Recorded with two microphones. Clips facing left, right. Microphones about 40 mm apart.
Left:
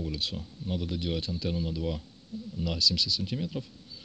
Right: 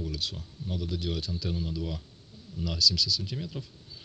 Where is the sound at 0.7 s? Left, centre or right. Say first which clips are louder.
Left 1 dB; left.